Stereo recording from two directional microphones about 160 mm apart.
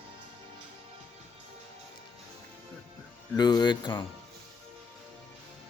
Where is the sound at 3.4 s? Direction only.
25° left (ahead or behind).